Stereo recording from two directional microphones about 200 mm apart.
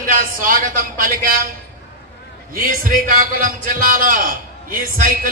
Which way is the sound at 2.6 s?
45° right (ahead or behind).